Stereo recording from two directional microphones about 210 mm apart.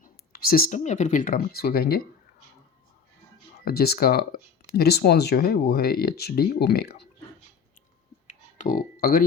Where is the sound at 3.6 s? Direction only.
50° left (ahead or behind).